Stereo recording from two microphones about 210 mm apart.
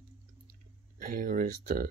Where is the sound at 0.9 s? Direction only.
40° right (ahead or behind).